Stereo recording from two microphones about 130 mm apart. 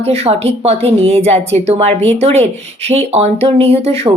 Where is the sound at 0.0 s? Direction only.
50° right (ahead or behind).